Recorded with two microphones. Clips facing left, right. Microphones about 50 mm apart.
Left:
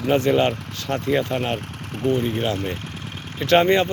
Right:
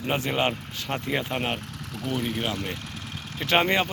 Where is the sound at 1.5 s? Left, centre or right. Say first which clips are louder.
Left 5 dB; left.